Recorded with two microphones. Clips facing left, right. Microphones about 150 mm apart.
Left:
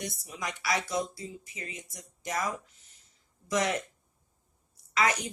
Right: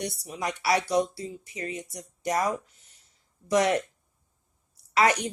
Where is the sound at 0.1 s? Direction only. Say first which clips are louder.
Right 6 dB; 35° right (ahead or behind).